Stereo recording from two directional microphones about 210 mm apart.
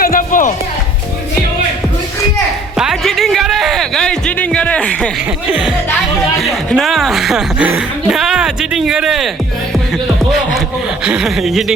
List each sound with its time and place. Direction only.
0.0 s music: 40° left (ahead or behind)
2.7 s music: centre (ahead or behind)
6.4 s speech: centre (ahead or behind)
11.0 s speech: 5° right (ahead or behind)